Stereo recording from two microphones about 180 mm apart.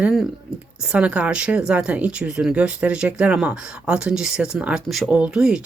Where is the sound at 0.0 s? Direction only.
Centre (ahead or behind).